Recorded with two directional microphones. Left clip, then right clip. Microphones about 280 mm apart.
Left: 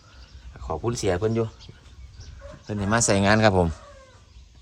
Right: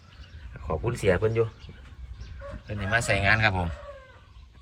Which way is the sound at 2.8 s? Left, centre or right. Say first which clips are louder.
Left 2 dB; centre.